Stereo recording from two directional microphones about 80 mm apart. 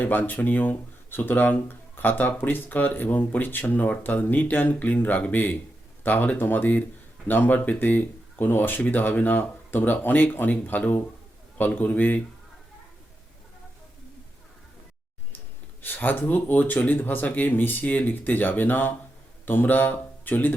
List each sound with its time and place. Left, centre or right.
0.0 s speech: left
15.8 s speech: left